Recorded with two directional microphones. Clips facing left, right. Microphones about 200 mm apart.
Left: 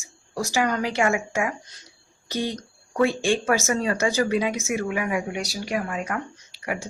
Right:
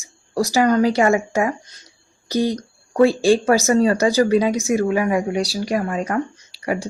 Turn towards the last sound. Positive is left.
turn(degrees=-35)  # may be behind; listen again after turning